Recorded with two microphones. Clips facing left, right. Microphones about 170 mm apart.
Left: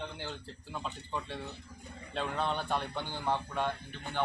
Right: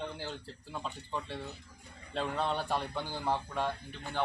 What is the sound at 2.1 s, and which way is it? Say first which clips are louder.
A man's voice: right 1 dB; centre (ahead or behind).